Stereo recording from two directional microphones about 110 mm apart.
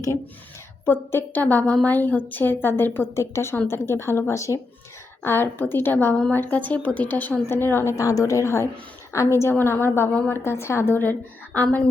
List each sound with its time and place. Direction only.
0.9 s a woman's voice: 20° left (ahead or behind)